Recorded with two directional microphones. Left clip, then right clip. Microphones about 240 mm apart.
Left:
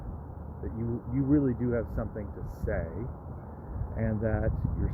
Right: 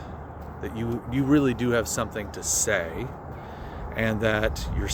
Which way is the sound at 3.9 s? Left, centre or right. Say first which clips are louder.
Right 8 dB; centre.